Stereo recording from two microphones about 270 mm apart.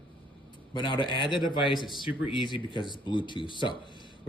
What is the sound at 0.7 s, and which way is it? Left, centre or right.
Speech, centre.